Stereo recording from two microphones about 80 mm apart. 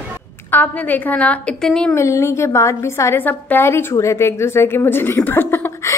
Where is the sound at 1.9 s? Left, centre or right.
Left.